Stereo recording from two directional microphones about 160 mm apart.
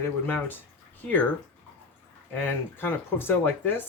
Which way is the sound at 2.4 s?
15° left (ahead or behind).